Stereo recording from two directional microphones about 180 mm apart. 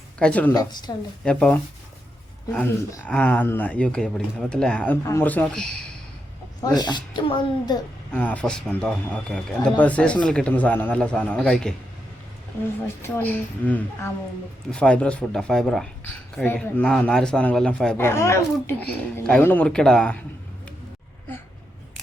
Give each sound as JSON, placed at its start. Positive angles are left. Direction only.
{"t": 0.2, "sound": "a man's voice", "side_deg": 5}
{"t": 0.5, "sound": "a woman's voice", "side_deg": 20}
{"t": 1.2, "sound": "a man's voice", "side_deg": 5}
{"t": 6.7, "sound": "a woman's voice", "side_deg": 25}
{"t": 8.1, "sound": "a man's voice", "side_deg": 10}
{"t": 13.0, "sound": "a man's voice", "side_deg": 10}